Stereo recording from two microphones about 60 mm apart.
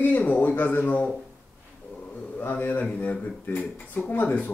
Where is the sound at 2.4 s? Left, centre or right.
Left.